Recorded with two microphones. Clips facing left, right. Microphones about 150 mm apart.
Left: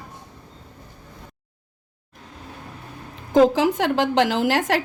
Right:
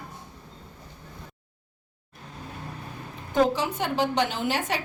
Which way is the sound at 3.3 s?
90° left.